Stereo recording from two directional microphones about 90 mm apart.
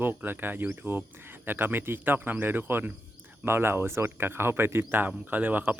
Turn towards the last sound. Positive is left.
turn(degrees=-20)  # may be behind; listen again after turning